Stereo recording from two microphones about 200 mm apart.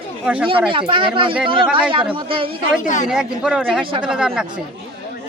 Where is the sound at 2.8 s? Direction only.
40° left (ahead or behind).